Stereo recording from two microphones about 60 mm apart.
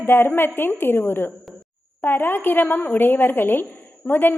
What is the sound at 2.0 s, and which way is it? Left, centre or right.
A woman's voice, left.